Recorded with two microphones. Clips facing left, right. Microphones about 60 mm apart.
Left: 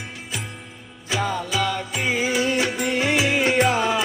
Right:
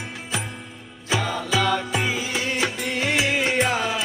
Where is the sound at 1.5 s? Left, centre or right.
Centre.